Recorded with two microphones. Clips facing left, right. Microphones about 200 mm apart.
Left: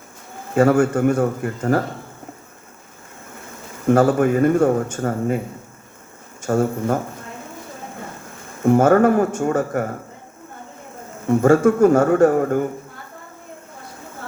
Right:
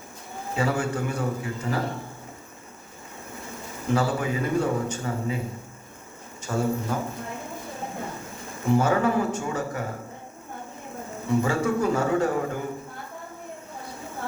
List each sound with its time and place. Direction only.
0.5 s speech: 50° left (ahead or behind)
3.8 s speech: 50° left (ahead or behind)
6.4 s speech: 50° left (ahead or behind)
8.6 s speech: 55° left (ahead or behind)
11.3 s speech: 50° left (ahead or behind)